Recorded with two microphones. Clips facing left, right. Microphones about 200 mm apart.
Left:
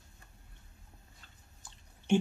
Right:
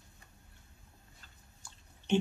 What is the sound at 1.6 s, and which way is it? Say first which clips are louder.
Chewing: left 1 dB; 20° left (ahead or behind).